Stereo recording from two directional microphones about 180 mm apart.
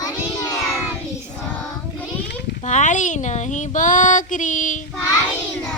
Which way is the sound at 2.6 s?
40° left (ahead or behind).